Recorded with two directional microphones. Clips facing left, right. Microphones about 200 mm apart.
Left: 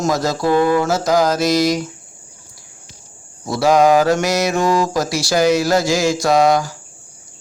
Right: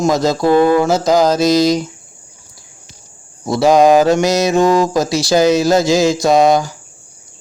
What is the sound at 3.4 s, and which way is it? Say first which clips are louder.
Mantra: right 3 dB; 20° right (ahead or behind).